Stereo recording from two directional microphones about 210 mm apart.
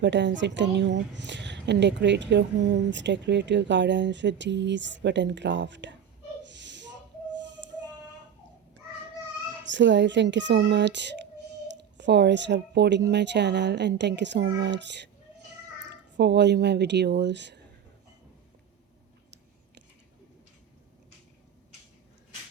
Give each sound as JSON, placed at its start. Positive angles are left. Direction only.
{"t": 0.0, "sound": "a woman's voice", "side_deg": -60}
{"t": 6.4, "sound": "snort", "side_deg": -55}
{"t": 9.6, "sound": "a woman's voice", "side_deg": -60}